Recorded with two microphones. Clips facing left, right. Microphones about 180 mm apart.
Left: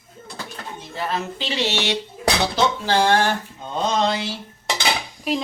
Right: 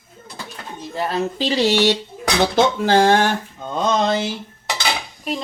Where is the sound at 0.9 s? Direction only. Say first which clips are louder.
Right 4 dB; 40° right (ahead or behind).